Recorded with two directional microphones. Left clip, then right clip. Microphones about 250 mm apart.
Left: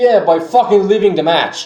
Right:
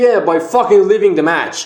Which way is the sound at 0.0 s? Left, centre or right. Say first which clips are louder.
Left 1 dB; right.